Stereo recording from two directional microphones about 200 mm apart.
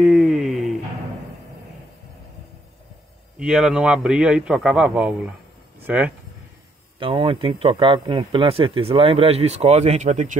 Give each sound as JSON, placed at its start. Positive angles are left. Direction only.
{"t": 0.0, "sound": "a sound", "side_deg": 0}
{"t": 3.3, "sound": "a man's voice", "side_deg": -5}
{"t": 7.0, "sound": "speech", "side_deg": -25}